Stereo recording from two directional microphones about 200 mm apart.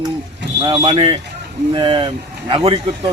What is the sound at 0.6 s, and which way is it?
Speech, 20° right (ahead or behind).